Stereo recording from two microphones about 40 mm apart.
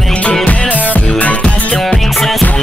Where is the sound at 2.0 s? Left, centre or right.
Centre.